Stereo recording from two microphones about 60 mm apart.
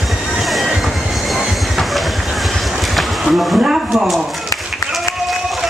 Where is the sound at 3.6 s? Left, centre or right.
Centre.